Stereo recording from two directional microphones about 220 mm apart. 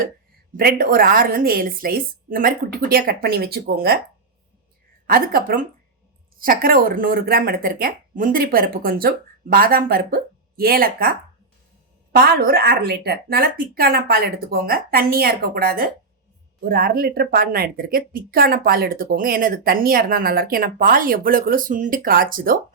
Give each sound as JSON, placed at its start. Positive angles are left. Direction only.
{"t": 0.5, "sound": "speech", "side_deg": -40}
{"t": 5.0, "sound": "speech", "side_deg": -40}
{"t": 12.1, "sound": "speech", "side_deg": -45}